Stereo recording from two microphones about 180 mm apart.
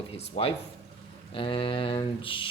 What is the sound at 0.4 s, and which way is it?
A man's voice, 30° left (ahead or behind).